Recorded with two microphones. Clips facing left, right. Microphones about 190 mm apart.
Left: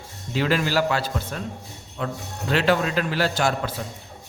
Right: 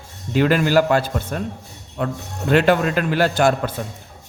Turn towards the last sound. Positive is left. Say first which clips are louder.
# right 6 dB
turn(degrees=-55)  # may be behind; listen again after turning